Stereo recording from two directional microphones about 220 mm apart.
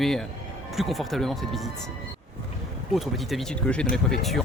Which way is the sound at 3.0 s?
Centre (ahead or behind).